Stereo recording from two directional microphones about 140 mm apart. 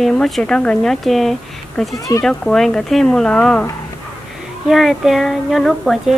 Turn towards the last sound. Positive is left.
turn(degrees=0)  # may be behind; listen again after turning